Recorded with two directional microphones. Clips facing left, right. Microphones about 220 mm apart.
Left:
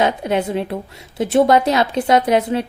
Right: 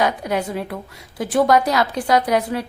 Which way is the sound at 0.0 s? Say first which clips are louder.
Left 3 dB; 25° left (ahead or behind).